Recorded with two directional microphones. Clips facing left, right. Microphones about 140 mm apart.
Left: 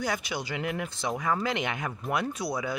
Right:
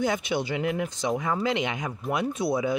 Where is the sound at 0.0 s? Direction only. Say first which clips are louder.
Right 5 dB; 25° right (ahead or behind).